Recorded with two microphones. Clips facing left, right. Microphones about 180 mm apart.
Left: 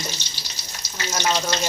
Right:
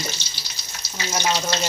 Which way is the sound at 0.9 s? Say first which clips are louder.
Even; 15° right (ahead or behind).